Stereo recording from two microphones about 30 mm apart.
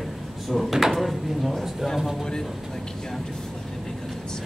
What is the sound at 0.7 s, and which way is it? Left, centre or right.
Speech, centre.